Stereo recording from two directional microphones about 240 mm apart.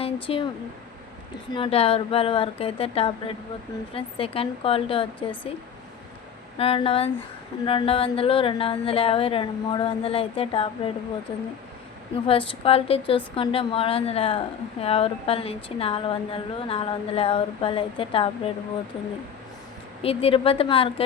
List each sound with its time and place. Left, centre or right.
0.0 s a sound: left
1.5 s a woman's voice: left
6.6 s a woman's voice: left
12.2 s a woman's voice: left
20.0 s a woman's voice: left